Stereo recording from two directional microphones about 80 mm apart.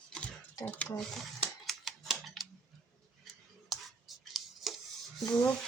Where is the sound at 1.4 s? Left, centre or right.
Centre.